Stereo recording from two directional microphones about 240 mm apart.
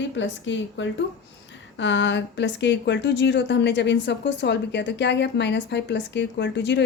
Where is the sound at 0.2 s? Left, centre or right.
Left.